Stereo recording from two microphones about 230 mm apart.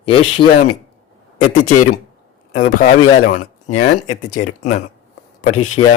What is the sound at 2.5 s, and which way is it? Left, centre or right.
Speech, left.